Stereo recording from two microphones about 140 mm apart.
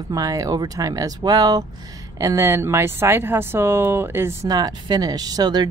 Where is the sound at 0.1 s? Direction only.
25° right (ahead or behind).